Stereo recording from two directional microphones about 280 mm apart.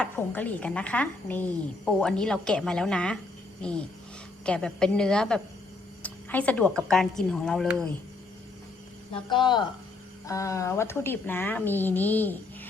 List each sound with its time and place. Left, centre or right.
0.0 s speech: centre
6.0 s a sound: centre
6.8 s speech: centre
9.3 s speech: centre